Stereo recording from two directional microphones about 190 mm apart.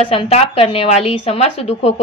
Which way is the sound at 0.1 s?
30° left (ahead or behind).